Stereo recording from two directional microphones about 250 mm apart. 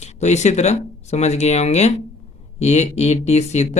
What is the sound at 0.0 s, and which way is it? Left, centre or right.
Speech, left.